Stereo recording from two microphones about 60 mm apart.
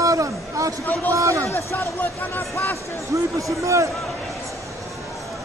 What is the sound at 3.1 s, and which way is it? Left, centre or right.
Speech, right.